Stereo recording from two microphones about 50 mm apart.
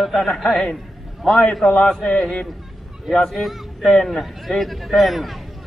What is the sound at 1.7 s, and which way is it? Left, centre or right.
Speech, left.